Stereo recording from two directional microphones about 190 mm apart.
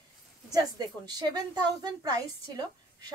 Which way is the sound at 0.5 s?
20° right (ahead or behind).